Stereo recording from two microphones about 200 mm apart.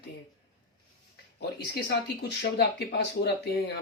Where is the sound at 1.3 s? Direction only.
55° left (ahead or behind).